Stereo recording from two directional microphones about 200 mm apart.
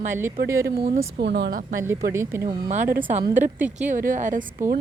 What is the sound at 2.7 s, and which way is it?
Speech, 40° right (ahead or behind).